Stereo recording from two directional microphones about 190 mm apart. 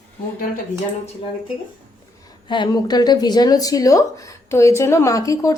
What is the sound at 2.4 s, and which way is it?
Speech, 25° left (ahead or behind).